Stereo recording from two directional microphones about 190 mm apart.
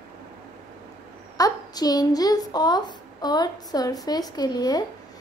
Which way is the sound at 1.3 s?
20° left (ahead or behind).